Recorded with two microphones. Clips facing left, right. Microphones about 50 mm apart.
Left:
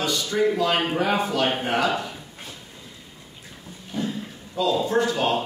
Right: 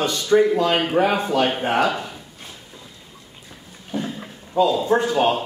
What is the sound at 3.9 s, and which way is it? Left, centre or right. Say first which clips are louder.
Speech: right 1 dB; centre.